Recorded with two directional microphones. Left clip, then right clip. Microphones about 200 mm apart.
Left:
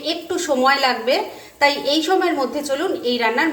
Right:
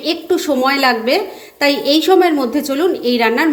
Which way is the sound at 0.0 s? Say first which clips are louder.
Right 6 dB; 35° right (ahead or behind).